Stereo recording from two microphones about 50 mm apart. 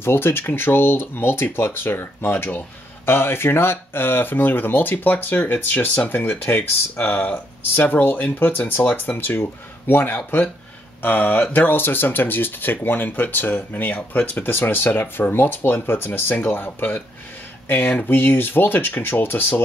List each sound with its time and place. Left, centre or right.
0.0 s speech: left